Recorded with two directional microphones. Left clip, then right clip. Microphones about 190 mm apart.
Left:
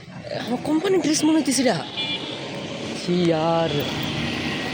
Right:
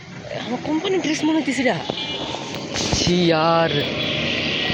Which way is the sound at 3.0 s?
5° left (ahead or behind).